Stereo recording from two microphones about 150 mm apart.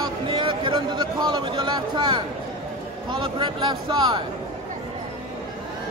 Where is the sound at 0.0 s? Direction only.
35° right (ahead or behind).